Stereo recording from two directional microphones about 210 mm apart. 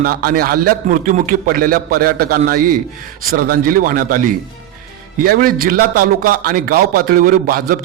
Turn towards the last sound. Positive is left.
turn(degrees=-45)  # may be behind; listen again after turning